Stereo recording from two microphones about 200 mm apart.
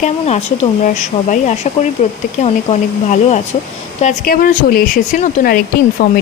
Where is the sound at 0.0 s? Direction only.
35° left (ahead or behind).